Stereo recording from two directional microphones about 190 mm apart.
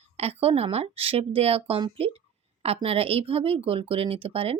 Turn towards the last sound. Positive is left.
turn(degrees=-30)  # may be behind; listen again after turning